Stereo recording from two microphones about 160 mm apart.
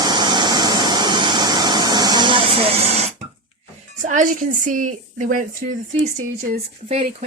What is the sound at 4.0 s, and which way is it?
Speech, 55° right (ahead or behind).